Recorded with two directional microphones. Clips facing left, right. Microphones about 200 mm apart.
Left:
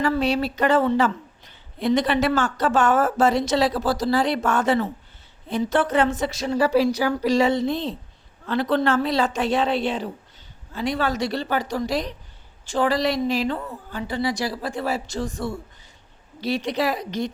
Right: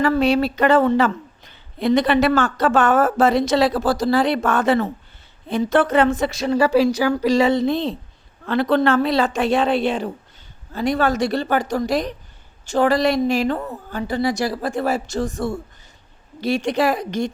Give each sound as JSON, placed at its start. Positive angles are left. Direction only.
{"t": 0.0, "sound": "a woman's voice", "side_deg": -55}